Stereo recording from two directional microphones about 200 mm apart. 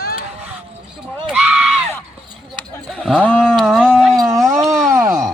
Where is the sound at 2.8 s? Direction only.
5° right (ahead or behind).